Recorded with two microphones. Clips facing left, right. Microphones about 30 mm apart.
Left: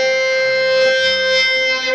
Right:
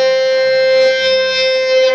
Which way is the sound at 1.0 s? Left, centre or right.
Centre.